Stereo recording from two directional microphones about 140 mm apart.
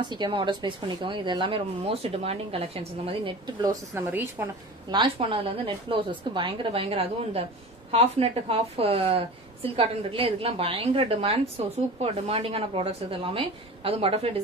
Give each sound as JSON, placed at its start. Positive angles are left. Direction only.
{"t": 0.0, "sound": "speech", "side_deg": -30}
{"t": 3.6, "sound": "a woman's voice", "side_deg": -15}
{"t": 4.8, "sound": "a woman's voice", "side_deg": -35}